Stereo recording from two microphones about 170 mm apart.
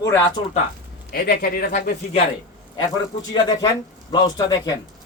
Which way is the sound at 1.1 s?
60° left (ahead or behind).